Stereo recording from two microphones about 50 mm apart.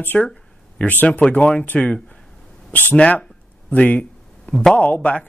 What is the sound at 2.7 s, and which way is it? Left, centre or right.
Speech, left.